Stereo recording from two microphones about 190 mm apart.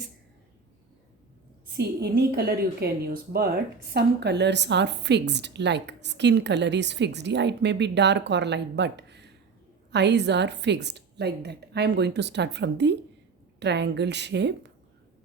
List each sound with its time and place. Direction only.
1.7 s a woman's voice: 60° right (ahead or behind)